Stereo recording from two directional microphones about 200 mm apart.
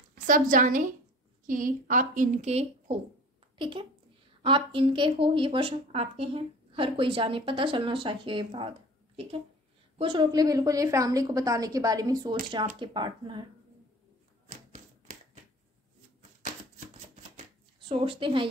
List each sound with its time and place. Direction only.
0.1 s a woman's voice: 45° right (ahead or behind); by 8.6 s 25° right (ahead or behind)
9.9 s a woman's voice: 25° right (ahead or behind)
14.5 s typewriter: 40° right (ahead or behind)
17.7 s speech: 25° right (ahead or behind)